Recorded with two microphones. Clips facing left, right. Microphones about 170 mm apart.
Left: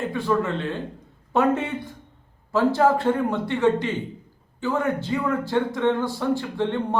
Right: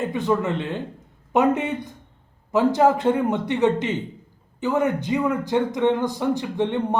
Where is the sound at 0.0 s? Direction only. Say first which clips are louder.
Right 1 dB; 20° right (ahead or behind).